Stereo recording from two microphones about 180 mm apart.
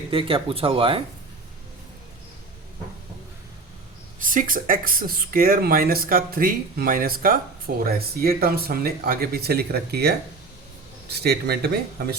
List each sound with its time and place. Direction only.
0.1 s speech: 30° right (ahead or behind)
4.2 s speech: 50° right (ahead or behind)